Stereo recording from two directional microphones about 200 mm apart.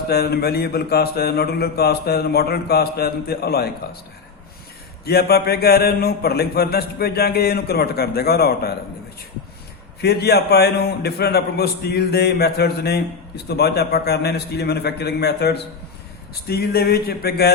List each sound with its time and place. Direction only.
0.1 s a man's voice: 55° left (ahead or behind)
5.0 s a man's voice: 50° left (ahead or behind)
10.0 s a man's voice: 55° left (ahead or behind)